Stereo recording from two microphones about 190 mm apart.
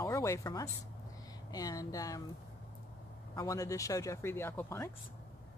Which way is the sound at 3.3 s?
15° left (ahead or behind).